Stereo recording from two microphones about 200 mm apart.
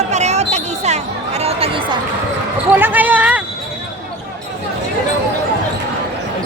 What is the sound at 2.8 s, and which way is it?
Basketball bounce, 10° right (ahead or behind).